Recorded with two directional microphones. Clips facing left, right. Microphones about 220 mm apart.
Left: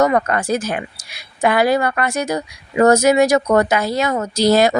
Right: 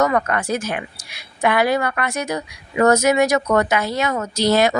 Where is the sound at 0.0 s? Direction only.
30° left (ahead or behind).